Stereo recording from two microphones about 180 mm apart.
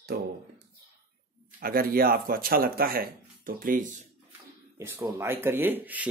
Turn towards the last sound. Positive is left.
turn(degrees=-10)  # may be behind; listen again after turning